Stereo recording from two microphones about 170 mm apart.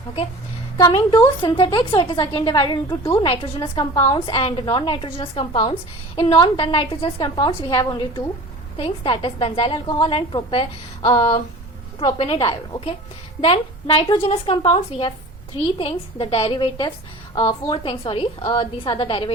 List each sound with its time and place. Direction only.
0.8 s a woman's voice: 25° left (ahead or behind)
3.2 s a woman's voice: 30° left (ahead or behind)